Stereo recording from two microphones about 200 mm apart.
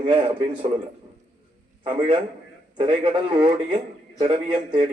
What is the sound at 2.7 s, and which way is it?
Speech, 25° right (ahead or behind).